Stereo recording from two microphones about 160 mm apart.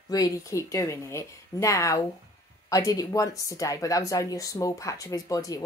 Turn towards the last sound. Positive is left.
turn(degrees=20)  # may be behind; listen again after turning